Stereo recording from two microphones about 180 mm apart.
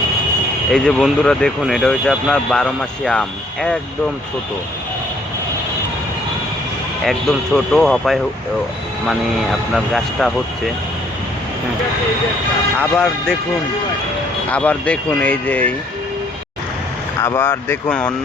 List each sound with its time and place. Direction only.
0.7 s speech: centre (ahead or behind)
7.0 s speech: centre (ahead or behind)
12.8 s speech: 5° left (ahead or behind)
14.5 s speech: 5° left (ahead or behind)
17.2 s speech: 15° left (ahead or behind)